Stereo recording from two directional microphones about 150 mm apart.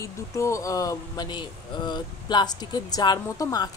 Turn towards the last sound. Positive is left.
turn(degrees=25)  # may be behind; listen again after turning